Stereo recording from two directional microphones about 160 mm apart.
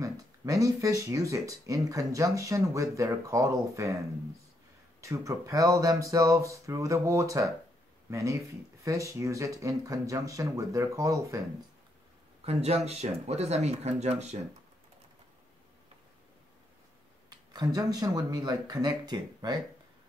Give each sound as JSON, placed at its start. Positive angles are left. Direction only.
{"t": 0.0, "sound": "speech", "side_deg": -20}
{"t": 5.0, "sound": "speech", "side_deg": -20}
{"t": 12.4, "sound": "speech", "side_deg": -40}
{"t": 17.3, "sound": "speech", "side_deg": -25}